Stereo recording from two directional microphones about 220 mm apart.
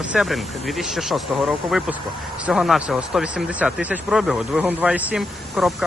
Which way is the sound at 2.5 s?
Centre (ahead or behind).